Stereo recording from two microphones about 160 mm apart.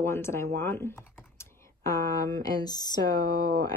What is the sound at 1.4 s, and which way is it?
Typing, 15° left (ahead or behind).